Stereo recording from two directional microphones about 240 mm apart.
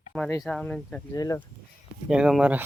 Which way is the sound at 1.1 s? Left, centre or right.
Centre.